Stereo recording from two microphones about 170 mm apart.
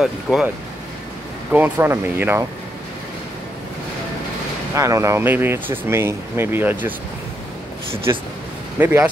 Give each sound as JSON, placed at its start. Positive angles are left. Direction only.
{"t": 0.0, "sound": "speech", "side_deg": -5}
{"t": 1.5, "sound": "speech", "side_deg": -10}
{"t": 4.7, "sound": "speech", "side_deg": -20}
{"t": 8.7, "sound": "speech", "side_deg": -10}